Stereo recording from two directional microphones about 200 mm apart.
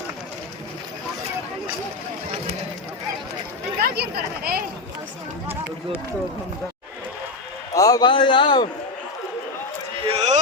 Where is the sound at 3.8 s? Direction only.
55° right (ahead or behind).